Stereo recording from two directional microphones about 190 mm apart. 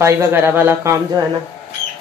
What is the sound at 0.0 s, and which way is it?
Speech, 10° right (ahead or behind).